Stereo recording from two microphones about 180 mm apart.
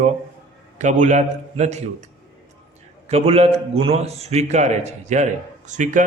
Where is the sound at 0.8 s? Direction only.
40° right (ahead or behind).